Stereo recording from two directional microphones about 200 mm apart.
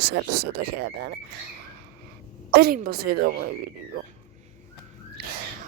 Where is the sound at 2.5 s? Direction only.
50° right (ahead or behind).